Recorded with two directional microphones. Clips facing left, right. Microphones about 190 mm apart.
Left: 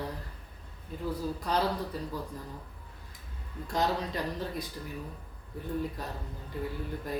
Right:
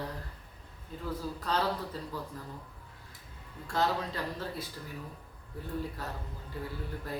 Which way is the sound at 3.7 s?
15° left (ahead or behind).